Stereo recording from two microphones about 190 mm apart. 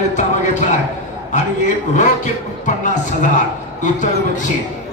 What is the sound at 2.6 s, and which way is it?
Music, 40° left (ahead or behind).